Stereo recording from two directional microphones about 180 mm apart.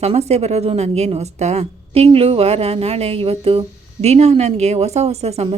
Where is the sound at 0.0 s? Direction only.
35° right (ahead or behind).